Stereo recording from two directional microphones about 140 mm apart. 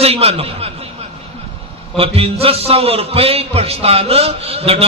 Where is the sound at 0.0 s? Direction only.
45° right (ahead or behind).